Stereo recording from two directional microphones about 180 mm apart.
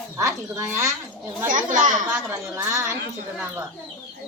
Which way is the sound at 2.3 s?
15° right (ahead or behind).